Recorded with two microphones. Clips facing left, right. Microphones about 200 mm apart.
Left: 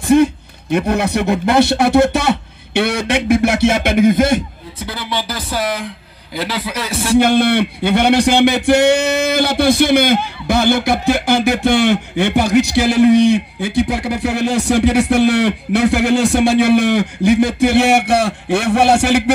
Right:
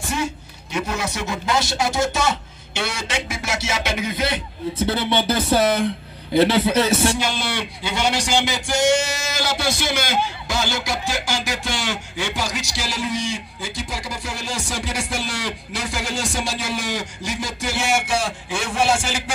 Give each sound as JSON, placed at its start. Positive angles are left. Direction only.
{"t": 0.0, "sound": "speech", "side_deg": 55}
{"t": 4.7, "sound": "speech", "side_deg": -25}
{"t": 7.2, "sound": "a man's voice", "side_deg": 55}